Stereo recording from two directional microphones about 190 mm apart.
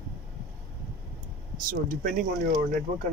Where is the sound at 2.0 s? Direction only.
45° right (ahead or behind).